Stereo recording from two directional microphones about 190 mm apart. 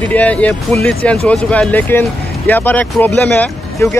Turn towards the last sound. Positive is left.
turn(degrees=10)  # may be behind; listen again after turning